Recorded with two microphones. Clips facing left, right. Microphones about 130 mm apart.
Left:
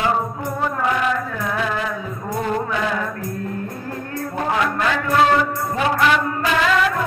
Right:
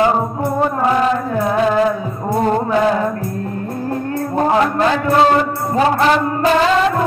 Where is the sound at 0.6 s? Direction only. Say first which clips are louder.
Right 5 dB; 35° right (ahead or behind).